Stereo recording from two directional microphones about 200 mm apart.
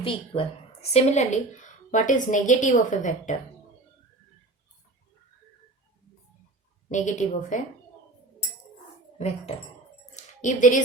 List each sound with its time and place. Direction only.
0.0 s a woman's voice: 30° left (ahead or behind)
6.8 s a woman's voice: 35° left (ahead or behind)
10.2 s a sound: 40° left (ahead or behind)